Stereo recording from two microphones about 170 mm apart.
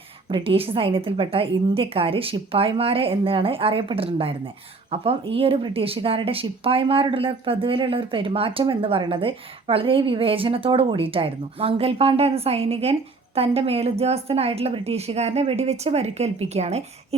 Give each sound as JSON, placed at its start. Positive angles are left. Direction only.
{"t": 0.3, "sound": "speech", "side_deg": -30}